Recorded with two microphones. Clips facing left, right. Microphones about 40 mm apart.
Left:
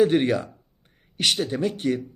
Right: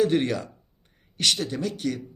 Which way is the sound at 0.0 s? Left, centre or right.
Centre.